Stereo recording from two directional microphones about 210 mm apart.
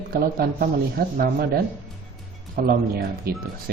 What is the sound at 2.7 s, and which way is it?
Speech, 45° right (ahead or behind).